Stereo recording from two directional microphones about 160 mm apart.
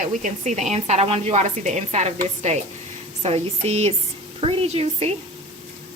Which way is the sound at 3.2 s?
40° right (ahead or behind).